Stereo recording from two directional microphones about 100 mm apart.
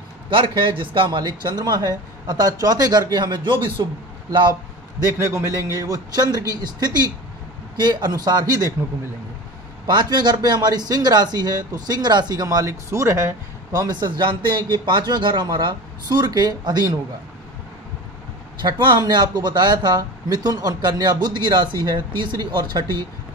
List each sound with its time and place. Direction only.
0.3 s speech: 60° right (ahead or behind)
5.0 s a man's voice: 30° right (ahead or behind)
9.8 s speech: 45° right (ahead or behind); by 13.8 s 30° right (ahead or behind)
13.8 s speech: 45° right (ahead or behind)
18.6 s speech: 50° right (ahead or behind)